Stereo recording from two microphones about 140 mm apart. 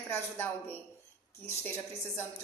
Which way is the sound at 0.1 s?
15° left (ahead or behind).